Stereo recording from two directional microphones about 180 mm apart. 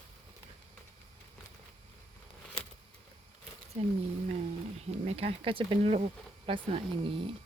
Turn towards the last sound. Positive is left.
turn(degrees=-30)  # may be behind; listen again after turning